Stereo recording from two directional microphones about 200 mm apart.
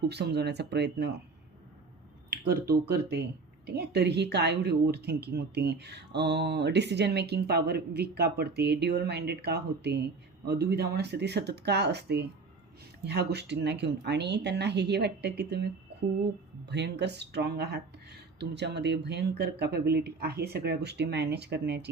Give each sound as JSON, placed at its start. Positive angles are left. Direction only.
{"t": 0.1, "sound": "a woman's voice", "side_deg": -55}
{"t": 2.3, "sound": "a woman's voice", "side_deg": -50}